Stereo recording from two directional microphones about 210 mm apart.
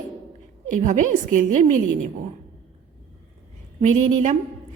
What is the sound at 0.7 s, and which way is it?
Speech, 35° right (ahead or behind).